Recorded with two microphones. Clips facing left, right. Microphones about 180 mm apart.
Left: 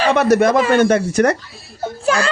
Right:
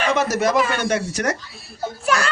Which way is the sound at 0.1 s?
60° left (ahead or behind).